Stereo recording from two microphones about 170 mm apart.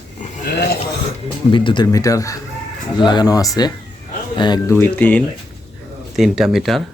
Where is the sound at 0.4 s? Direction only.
70° left (ahead or behind).